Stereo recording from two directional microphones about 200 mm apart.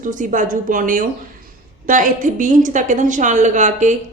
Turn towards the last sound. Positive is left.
turn(degrees=-35)  # may be behind; listen again after turning